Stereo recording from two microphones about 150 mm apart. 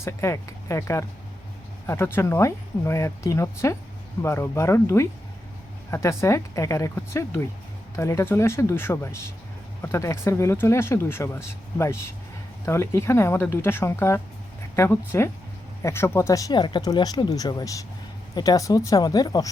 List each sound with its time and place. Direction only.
0.0 s speech: 20° left (ahead or behind)